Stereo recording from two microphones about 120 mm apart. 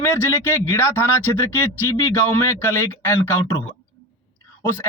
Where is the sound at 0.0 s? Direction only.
20° left (ahead or behind).